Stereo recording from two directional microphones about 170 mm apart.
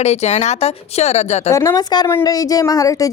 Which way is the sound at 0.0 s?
40° left (ahead or behind).